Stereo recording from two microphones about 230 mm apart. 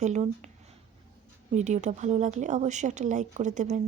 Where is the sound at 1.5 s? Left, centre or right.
Right.